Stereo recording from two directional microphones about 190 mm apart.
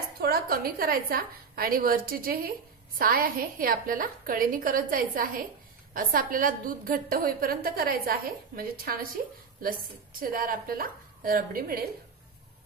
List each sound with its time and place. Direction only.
0.2 s a woman's voice: 55° right (ahead or behind)
10.2 s a woman's voice: 50° right (ahead or behind)